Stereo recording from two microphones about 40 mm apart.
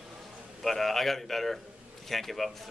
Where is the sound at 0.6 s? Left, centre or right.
Centre.